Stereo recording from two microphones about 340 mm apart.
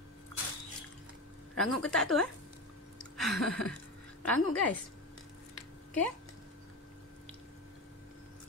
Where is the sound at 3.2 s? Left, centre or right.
Centre.